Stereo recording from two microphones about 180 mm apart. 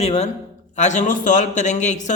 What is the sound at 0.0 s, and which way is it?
A woman's voice, 35° left (ahead or behind).